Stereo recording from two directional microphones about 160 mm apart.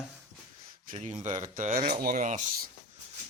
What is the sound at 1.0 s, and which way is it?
Speech, 45° right (ahead or behind).